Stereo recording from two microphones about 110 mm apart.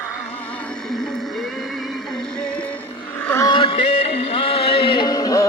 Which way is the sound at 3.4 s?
50° left (ahead or behind).